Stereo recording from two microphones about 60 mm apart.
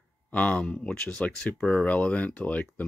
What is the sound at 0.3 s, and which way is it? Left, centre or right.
Speech, left.